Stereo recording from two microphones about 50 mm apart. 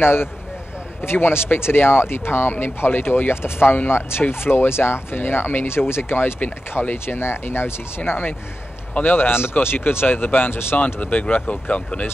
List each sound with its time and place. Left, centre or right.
0.0 s speech: left
7.2 s speech: left
8.0 s speech: left
11.0 s speech: left